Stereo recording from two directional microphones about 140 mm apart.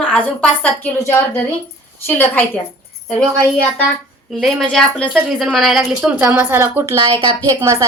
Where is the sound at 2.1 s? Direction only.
15° left (ahead or behind).